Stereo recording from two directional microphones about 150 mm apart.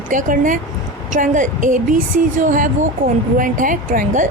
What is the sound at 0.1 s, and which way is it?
Speech, 60° right (ahead or behind).